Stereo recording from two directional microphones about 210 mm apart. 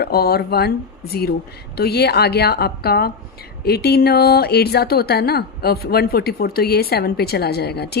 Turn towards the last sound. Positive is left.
turn(degrees=50)  # may be behind; listen again after turning